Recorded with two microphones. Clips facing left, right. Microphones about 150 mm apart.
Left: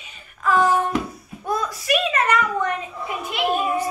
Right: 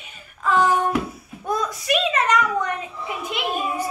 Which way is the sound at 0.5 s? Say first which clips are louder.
Even; centre (ahead or behind).